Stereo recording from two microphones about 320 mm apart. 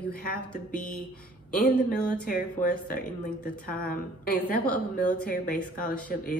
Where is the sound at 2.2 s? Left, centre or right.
Left.